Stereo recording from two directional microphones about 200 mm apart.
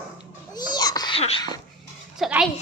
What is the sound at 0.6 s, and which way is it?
Babbling, 20° left (ahead or behind).